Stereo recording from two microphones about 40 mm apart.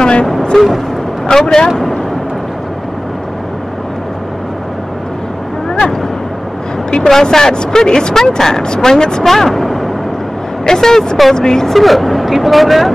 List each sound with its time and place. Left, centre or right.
0.0 s vehicle: left
0.5 s speech: centre
6.9 s speech: centre
9.2 s speech: centre
10.6 s speech: centre
11.7 s speech: centre